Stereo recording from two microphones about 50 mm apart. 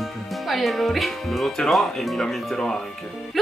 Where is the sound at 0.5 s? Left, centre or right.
Centre.